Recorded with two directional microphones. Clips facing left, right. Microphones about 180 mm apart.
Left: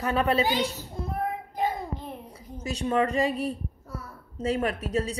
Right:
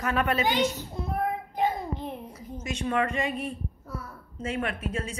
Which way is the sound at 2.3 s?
35° left (ahead or behind).